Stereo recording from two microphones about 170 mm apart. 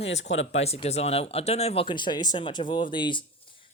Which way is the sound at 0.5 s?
35° left (ahead or behind).